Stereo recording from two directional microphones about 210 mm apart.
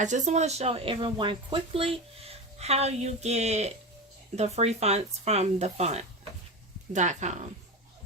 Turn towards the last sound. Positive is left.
turn(degrees=-35)  # may be behind; listen again after turning